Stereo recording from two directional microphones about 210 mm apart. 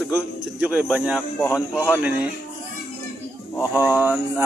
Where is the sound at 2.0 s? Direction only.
5° right (ahead or behind).